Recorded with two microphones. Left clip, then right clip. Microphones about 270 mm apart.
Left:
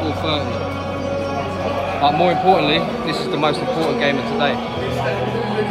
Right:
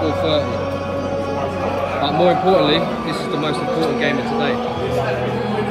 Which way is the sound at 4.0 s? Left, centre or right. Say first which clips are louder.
Left 1 dB; left.